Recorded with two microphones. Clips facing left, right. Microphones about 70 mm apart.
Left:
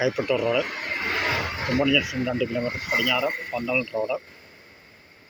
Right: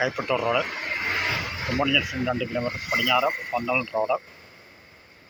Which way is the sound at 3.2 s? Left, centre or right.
Centre.